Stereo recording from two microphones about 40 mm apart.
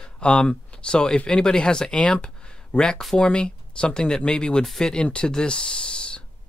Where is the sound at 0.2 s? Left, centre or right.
Left.